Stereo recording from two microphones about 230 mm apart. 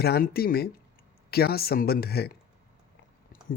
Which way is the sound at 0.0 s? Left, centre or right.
Left.